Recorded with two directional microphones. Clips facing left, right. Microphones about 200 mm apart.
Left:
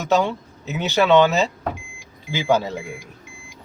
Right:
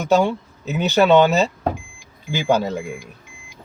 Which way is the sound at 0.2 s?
15° right (ahead or behind).